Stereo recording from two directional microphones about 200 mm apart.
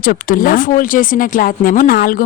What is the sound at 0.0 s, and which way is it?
Speech, 45° left (ahead or behind).